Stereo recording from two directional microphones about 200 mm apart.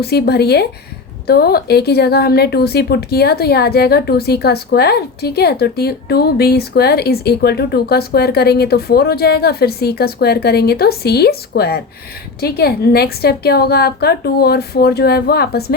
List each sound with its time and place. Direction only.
0.0 s a woman's voice: 55° left (ahead or behind)